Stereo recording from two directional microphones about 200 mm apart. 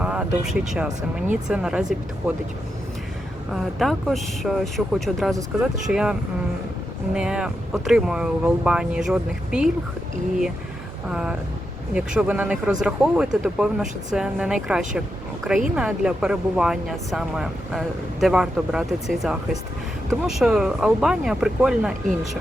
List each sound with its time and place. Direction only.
0.0 s speech: 5° right (ahead or behind)
3.5 s speech: centre (ahead or behind)
11.1 s speech: 5° right (ahead or behind)